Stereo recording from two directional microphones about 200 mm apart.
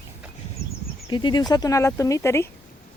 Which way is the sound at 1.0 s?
20° left (ahead or behind).